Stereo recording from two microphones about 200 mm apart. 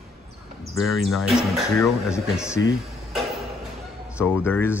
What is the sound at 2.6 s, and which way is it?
Speech, 70° left (ahead or behind).